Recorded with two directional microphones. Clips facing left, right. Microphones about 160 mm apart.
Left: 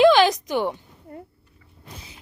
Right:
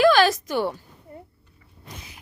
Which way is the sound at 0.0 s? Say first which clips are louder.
Left 2 dB; 20° left (ahead or behind).